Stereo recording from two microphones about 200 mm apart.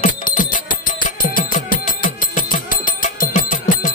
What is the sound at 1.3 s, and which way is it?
Music, 40° left (ahead or behind).